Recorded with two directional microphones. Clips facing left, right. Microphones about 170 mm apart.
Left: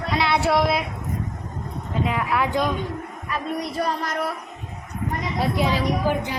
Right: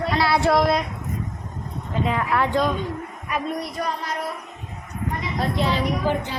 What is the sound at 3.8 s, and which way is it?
Speech, 35° left (ahead or behind).